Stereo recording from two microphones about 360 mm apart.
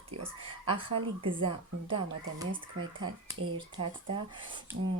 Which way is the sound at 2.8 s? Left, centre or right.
Right.